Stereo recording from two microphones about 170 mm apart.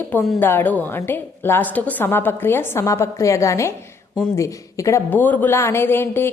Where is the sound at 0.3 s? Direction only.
10° left (ahead or behind).